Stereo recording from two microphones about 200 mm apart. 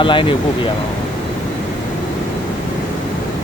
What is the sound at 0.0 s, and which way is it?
Speech, 25° left (ahead or behind).